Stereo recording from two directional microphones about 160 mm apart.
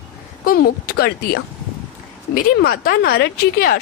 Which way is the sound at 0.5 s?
70° left (ahead or behind).